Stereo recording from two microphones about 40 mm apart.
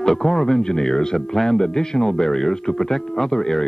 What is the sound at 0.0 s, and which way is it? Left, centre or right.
A man's voice, centre.